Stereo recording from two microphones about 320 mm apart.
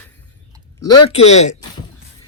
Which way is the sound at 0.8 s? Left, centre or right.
Centre.